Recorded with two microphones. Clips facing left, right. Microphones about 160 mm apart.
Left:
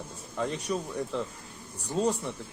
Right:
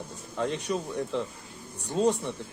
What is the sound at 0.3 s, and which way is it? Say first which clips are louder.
Speech: right 1 dB; centre (ahead or behind).